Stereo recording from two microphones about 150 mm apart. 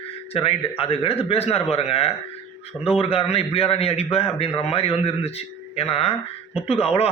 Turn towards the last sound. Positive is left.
turn(degrees=40)  # may be behind; listen again after turning